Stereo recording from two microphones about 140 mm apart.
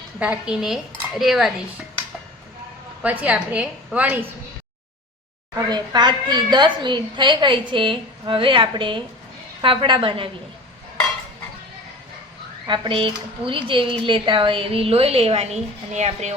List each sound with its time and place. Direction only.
0.2 s speech: 10° right (ahead or behind)
3.0 s a woman's voice: 10° right (ahead or behind)
5.5 s speech: 30° right (ahead or behind)
12.6 s speech: 35° right (ahead or behind); by 16.3 s 55° right (ahead or behind)